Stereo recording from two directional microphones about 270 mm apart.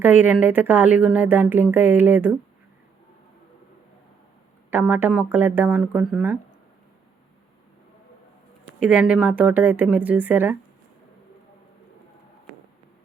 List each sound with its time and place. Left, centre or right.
0.0 s speech: centre
4.7 s speech: centre
8.8 s speech: centre